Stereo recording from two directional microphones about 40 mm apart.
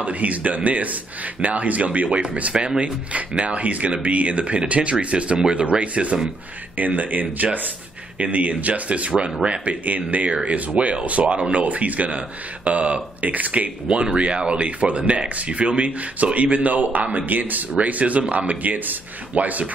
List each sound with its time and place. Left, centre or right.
0.0 s a man's voice: right
2.5 s speech: right
2.8 s a man's voice: right
6.8 s a man's voice: right
9.8 s a man's voice: right
14.1 s a man's voice: right